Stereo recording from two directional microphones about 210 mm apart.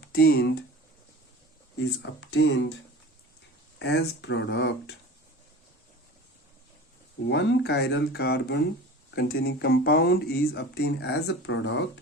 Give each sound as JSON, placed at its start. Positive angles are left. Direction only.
{"t": 0.0, "sound": "speech", "side_deg": 50}
{"t": 2.0, "sound": "speech", "side_deg": 60}
{"t": 3.8, "sound": "speech", "side_deg": 60}
{"t": 7.3, "sound": "speech", "side_deg": 60}